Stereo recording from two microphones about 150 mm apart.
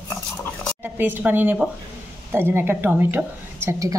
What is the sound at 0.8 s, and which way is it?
A woman's voice, 10° right (ahead or behind).